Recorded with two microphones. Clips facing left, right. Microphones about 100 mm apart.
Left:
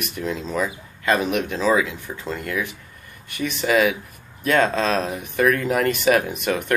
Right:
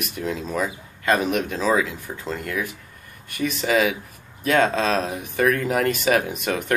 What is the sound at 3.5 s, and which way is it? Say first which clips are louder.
Speech: left 2 dB; 55° left (ahead or behind).